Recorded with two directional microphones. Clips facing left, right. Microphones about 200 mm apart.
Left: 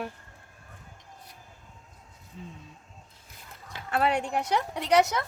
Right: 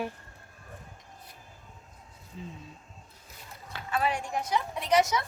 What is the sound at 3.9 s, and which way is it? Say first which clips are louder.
Speech: left 4 dB; 65° left (ahead or behind).